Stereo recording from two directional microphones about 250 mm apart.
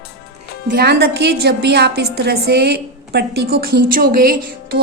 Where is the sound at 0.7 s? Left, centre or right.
Right.